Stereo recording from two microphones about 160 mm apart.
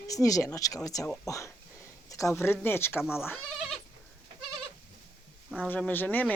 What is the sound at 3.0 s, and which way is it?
Speech, 5° right (ahead or behind).